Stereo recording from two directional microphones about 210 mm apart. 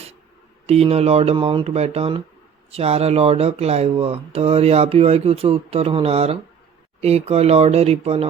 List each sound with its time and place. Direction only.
0.7 s speech: 30° right (ahead or behind)